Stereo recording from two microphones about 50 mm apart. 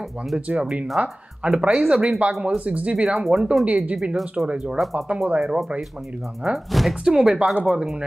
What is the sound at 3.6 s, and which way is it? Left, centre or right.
Speech, right.